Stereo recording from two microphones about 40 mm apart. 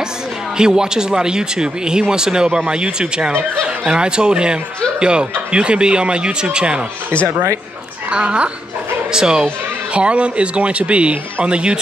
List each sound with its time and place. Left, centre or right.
0.6 s speech: centre
8.1 s speech: right
9.1 s speech: centre
9.9 s speech: right